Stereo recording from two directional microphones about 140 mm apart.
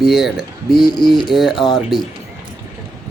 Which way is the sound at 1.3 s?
Centre (ahead or behind).